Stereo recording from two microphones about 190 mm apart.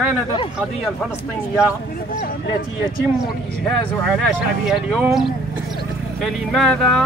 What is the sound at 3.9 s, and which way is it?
Speech, centre (ahead or behind).